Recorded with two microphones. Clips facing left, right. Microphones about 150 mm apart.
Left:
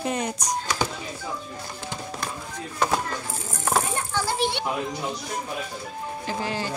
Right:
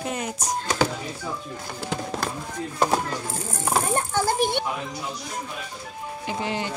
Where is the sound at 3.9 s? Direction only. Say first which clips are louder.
Right 4 dB; 45° right (ahead or behind).